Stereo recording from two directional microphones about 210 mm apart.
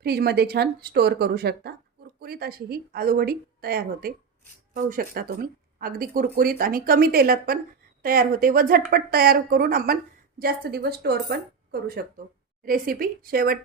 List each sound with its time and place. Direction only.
0.0 s a woman's voice: 50° right (ahead or behind)